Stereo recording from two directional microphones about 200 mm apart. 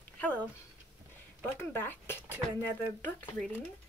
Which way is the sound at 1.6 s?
10° left (ahead or behind).